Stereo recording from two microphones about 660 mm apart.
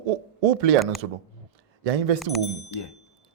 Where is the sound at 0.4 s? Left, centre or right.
Right.